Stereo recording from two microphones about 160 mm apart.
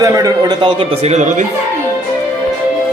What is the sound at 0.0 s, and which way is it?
A man's voice, 20° right (ahead or behind).